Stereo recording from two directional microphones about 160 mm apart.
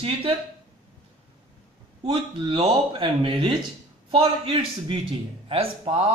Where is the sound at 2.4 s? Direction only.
35° right (ahead or behind).